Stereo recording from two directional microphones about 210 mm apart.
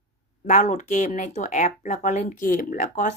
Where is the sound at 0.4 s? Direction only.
35° left (ahead or behind).